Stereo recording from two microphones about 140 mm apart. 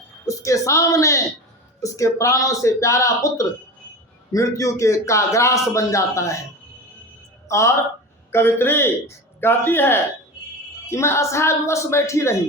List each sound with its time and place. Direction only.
0.3 s a man's voice: 20° left (ahead or behind)
7.4 s a sound: 20° left (ahead or behind)
8.3 s a man's voice: 15° left (ahead or behind)